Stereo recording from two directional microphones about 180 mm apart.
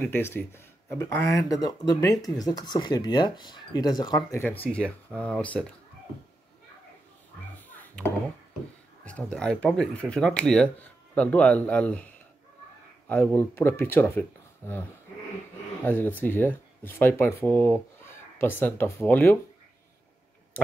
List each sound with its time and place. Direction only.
0.0 s speech: 10° left (ahead or behind)
4.4 s speech: 10° left (ahead or behind)
7.7 s a sound: 10° left (ahead or behind)
9.0 s speech: 5° left (ahead or behind)
13.1 s speech: 10° left (ahead or behind)
15.8 s speech: 10° left (ahead or behind)